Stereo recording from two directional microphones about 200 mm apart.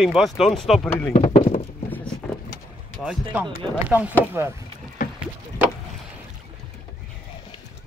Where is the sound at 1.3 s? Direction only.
35° left (ahead or behind).